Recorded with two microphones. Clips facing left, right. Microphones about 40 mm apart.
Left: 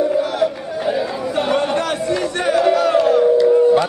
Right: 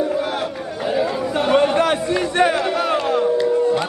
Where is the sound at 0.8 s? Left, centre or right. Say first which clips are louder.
Right 1 dB; centre.